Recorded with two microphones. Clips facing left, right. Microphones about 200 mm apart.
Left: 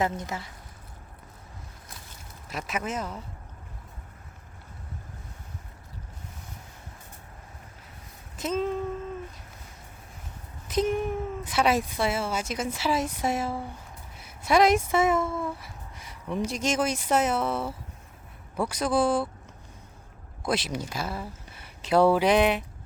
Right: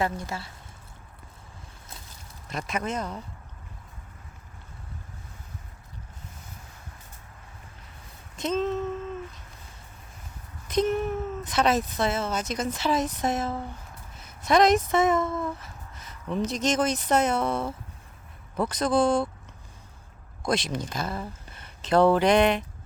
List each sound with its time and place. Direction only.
0.0 s speech: 20° left (ahead or behind)
2.5 s speech: 5° left (ahead or behind)
8.4 s a sound: 10° left (ahead or behind)
10.7 s speech: 10° left (ahead or behind)
20.4 s speech: 5° left (ahead or behind)